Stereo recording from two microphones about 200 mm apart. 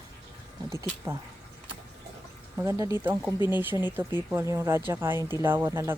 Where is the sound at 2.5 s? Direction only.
15° right (ahead or behind).